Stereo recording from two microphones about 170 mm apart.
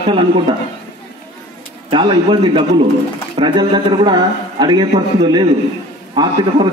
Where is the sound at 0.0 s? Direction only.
30° right (ahead or behind).